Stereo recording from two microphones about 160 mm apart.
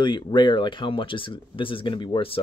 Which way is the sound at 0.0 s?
30° left (ahead or behind).